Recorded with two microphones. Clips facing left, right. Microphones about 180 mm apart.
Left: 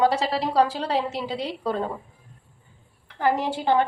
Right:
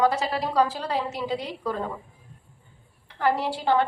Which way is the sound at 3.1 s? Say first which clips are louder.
Left 1 dB; 15° left (ahead or behind).